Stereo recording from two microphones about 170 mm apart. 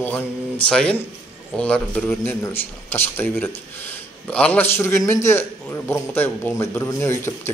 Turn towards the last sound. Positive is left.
turn(degrees=15)  # may be behind; listen again after turning